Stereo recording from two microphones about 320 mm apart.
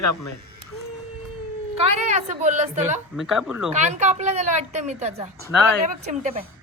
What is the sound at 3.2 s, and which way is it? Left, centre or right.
Speech, centre.